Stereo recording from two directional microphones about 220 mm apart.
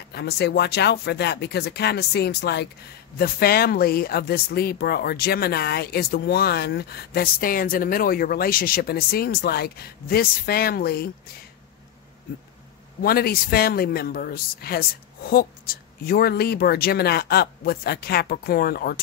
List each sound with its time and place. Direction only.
0.1 s speech: 50° left (ahead or behind)
13.0 s speech: 45° left (ahead or behind)